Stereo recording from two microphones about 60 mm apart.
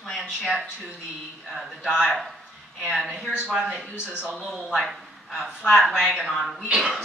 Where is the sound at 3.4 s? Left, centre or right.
Centre.